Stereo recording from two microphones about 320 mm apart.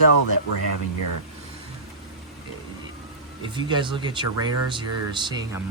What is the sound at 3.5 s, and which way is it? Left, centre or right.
Speech, centre.